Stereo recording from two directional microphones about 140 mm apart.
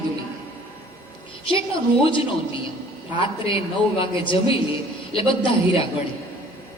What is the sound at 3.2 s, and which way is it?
A man's voice, 40° left (ahead or behind).